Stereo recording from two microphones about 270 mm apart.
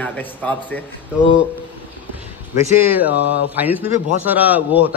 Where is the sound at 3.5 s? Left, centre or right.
Centre.